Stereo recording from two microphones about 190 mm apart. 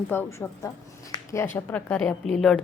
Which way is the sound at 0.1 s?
10° left (ahead or behind).